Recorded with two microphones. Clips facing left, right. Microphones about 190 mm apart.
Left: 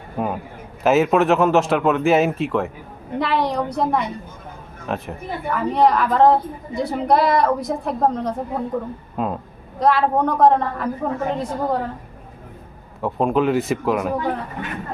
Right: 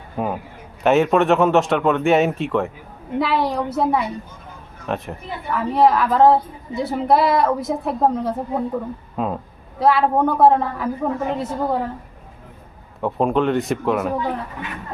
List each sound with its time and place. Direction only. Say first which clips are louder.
0.2 s a man's voice: even; centre (ahead or behind)
13.0 s a woman's voice: even; centre (ahead or behind)